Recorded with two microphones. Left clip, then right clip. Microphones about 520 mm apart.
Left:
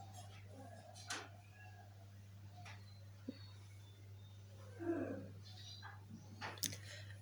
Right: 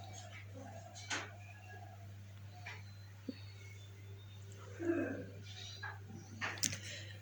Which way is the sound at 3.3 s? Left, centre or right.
Left.